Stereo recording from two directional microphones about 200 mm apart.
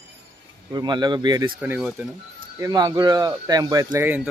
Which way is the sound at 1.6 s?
5° right (ahead or behind).